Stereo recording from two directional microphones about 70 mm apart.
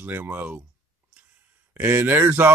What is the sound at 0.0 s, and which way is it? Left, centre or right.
Speech, right.